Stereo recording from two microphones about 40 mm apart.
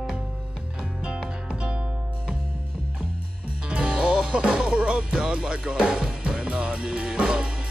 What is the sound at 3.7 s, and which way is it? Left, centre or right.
Music, right.